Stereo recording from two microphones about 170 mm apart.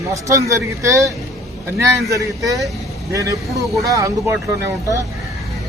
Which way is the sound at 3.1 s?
20° right (ahead or behind).